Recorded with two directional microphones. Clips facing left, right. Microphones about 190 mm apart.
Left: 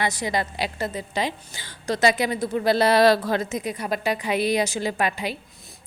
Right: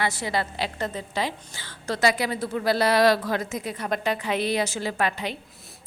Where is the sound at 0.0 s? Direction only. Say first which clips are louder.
Left 2 dB; 15° left (ahead or behind).